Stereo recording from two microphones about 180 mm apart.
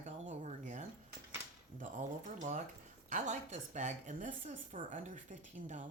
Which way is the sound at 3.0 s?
40° right (ahead or behind).